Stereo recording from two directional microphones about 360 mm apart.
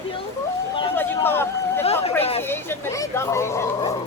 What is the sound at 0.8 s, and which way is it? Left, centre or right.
Speech, centre.